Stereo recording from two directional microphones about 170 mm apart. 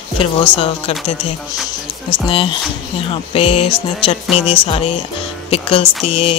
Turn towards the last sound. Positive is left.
turn(degrees=35)  # may be behind; listen again after turning